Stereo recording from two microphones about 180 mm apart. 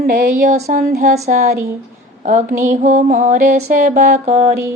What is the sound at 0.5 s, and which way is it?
Mantra, 50° right (ahead or behind).